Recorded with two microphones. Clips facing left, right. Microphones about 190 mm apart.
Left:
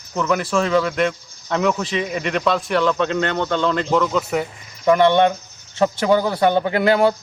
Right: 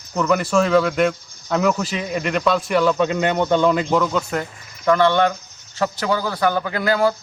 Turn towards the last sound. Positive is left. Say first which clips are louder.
# left 3 dB
turn(degrees=25)  # may be behind; listen again after turning